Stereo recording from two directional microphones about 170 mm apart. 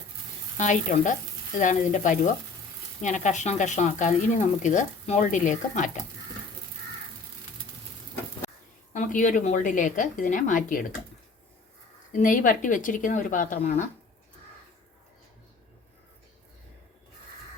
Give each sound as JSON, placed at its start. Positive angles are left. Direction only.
{"t": 0.5, "sound": "speech", "side_deg": 45}
{"t": 8.9, "sound": "speech", "side_deg": 50}
{"t": 12.1, "sound": "speech", "side_deg": 50}